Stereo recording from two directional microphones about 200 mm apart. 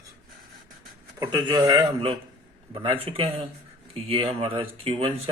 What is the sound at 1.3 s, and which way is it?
Speech, 20° right (ahead or behind).